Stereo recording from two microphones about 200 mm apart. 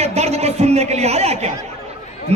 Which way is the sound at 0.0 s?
30° right (ahead or behind).